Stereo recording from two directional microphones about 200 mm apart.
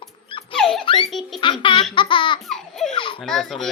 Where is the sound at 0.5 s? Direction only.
5° left (ahead or behind).